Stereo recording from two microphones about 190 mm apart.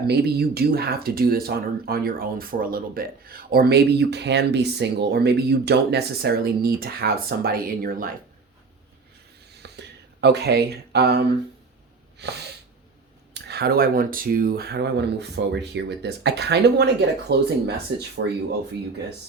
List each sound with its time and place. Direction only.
0.1 s speech: 55° right (ahead or behind)
9.5 s a sound: 60° right (ahead or behind)
12.2 s speech: 60° right (ahead or behind)